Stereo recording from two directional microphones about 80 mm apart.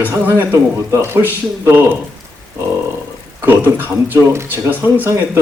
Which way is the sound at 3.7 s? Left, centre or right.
Right.